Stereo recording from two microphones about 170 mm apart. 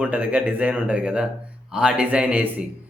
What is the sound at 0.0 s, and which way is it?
Speech, 10° right (ahead or behind).